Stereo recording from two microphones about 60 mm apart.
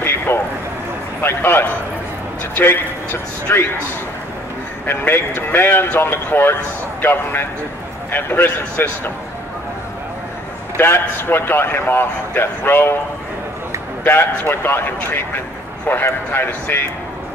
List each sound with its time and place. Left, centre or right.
0.3 s a sound: left
1.2 s a man's voice: left
4.8 s a man's voice: left
10.8 s a man's voice: left
14.0 s a man's voice: left